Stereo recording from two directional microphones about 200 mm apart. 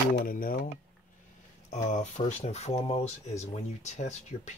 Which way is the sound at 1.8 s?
35° left (ahead or behind).